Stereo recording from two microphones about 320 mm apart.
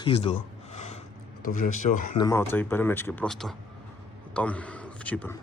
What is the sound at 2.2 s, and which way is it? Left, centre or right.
A man's voice, centre.